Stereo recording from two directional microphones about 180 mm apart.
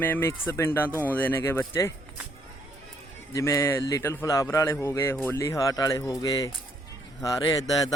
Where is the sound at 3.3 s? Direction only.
15° left (ahead or behind).